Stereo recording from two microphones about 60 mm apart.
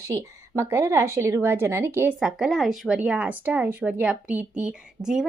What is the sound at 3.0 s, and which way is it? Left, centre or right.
A woman's voice, right.